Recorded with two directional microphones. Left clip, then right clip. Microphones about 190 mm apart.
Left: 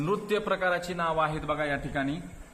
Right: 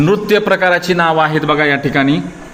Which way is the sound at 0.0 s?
5° right (ahead or behind).